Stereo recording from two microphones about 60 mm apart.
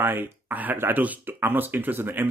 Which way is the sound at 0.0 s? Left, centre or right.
Right.